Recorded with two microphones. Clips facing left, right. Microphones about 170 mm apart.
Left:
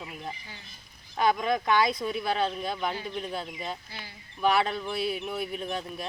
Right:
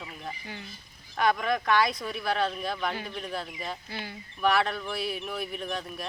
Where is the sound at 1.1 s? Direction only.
20° left (ahead or behind).